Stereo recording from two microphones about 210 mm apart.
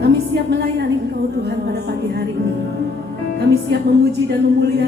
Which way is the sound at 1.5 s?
50° right (ahead or behind).